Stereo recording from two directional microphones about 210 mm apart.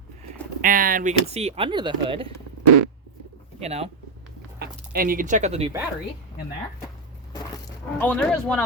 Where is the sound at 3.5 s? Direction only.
30° right (ahead or behind).